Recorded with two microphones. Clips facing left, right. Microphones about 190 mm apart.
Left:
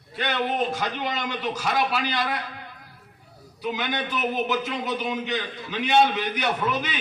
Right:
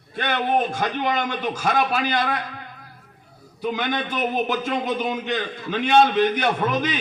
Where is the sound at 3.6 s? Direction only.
50° right (ahead or behind).